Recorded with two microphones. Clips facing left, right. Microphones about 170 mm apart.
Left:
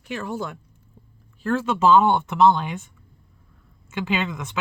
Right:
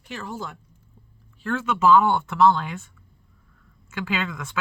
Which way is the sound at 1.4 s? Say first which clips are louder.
Left 3 dB; 35° left (ahead or behind).